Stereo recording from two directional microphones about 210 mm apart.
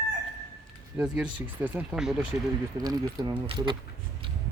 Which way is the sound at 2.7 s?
15° right (ahead or behind).